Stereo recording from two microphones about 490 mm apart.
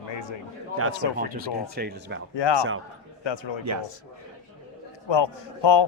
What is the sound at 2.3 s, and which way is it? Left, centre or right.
A man's voice, left.